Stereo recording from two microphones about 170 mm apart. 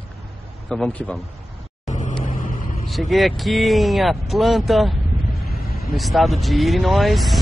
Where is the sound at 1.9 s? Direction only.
45° left (ahead or behind).